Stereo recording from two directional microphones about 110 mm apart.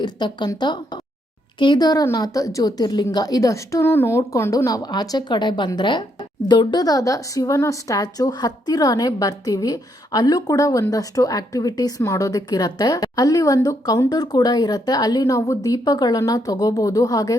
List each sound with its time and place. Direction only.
0.0 s a woman's voice: 40° left (ahead or behind)